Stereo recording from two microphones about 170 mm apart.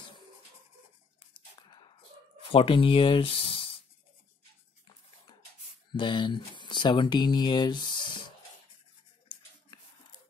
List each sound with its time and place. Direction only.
2.5 s speech: 30° left (ahead or behind)
5.9 s speech: 25° left (ahead or behind)